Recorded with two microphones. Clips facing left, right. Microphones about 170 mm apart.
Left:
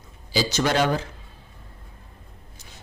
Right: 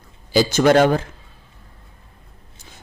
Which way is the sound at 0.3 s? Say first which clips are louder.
Right 8 dB; 55° right (ahead or behind).